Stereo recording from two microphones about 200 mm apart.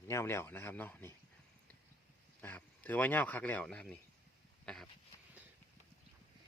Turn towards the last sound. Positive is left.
turn(degrees=5)  # may be behind; listen again after turning